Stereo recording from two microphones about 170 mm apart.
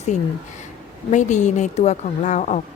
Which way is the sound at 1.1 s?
45° left (ahead or behind).